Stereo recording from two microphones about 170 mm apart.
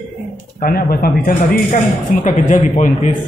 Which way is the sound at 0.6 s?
60° left (ahead or behind).